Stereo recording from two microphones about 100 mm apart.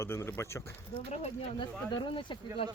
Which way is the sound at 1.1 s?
90° left.